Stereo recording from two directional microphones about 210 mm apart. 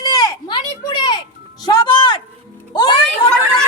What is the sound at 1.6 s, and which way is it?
Music, 20° left (ahead or behind).